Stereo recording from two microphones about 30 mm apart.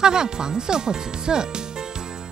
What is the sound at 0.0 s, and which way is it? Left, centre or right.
Speech, right.